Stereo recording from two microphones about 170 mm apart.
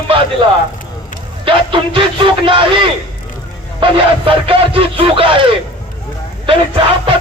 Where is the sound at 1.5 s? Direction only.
30° right (ahead or behind).